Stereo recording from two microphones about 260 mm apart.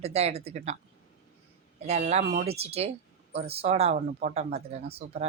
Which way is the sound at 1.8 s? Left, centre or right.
Right.